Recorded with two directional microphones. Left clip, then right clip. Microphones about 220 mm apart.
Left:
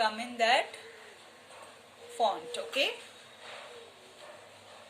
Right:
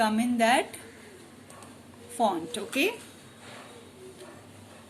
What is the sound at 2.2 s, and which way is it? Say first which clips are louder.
Speech: right 3 dB; 25° right (ahead or behind).